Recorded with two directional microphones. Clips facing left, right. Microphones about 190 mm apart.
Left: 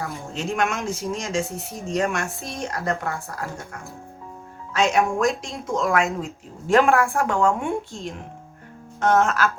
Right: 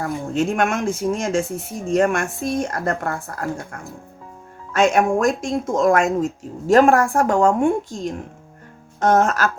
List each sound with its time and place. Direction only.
0.3 s speech: 55° right (ahead or behind); by 7.9 s 35° right (ahead or behind)
9.0 s speech: 35° right (ahead or behind)